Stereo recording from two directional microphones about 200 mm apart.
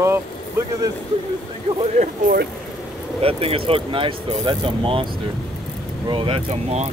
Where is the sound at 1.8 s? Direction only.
35° right (ahead or behind).